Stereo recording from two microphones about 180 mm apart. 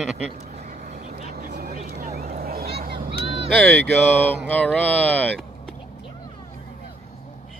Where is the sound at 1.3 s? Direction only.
60° right (ahead or behind).